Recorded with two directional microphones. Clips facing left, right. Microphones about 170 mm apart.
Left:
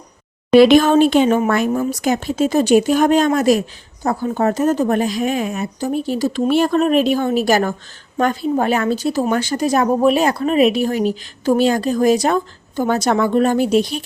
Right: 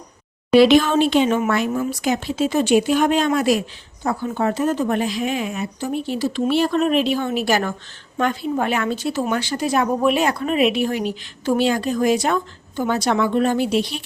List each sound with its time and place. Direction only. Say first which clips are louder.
0.5 s a woman's voice: left 3 dB; 50° left (ahead or behind)